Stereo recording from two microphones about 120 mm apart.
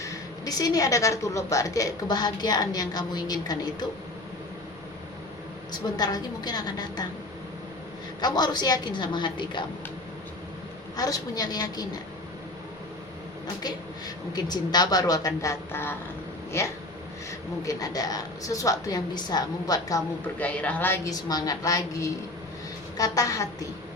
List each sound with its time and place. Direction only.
0.0 s a woman's voice: 30° left (ahead or behind)
6.0 s a woman's voice: 35° left (ahead or behind)
8.2 s a woman's voice: 35° left (ahead or behind)
10.9 s a woman's voice: 30° left (ahead or behind)
14.3 s a woman's voice: 35° left (ahead or behind)
20.2 s a woman's voice: 10° left (ahead or behind)
21.1 s a woman's voice: 30° left (ahead or behind)